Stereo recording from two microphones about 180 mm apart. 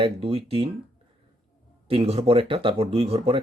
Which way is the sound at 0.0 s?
35° right (ahead or behind).